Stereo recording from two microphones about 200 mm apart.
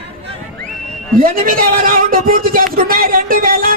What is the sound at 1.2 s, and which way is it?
Speech, 45° right (ahead or behind).